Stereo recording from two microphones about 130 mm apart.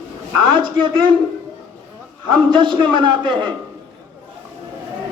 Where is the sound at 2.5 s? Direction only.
35° right (ahead or behind).